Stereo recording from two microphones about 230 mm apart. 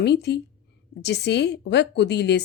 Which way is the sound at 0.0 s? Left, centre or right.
Left.